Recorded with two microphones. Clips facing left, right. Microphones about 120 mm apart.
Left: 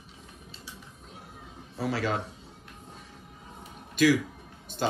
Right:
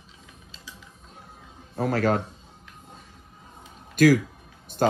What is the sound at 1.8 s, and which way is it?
Speech, 45° right (ahead or behind).